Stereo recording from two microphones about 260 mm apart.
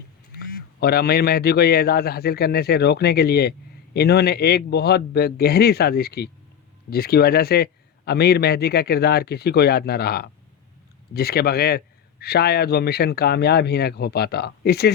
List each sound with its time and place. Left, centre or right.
0.3 s a man's voice: left